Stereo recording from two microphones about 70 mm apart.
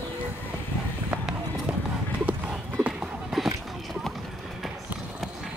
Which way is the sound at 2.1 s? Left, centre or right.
Centre.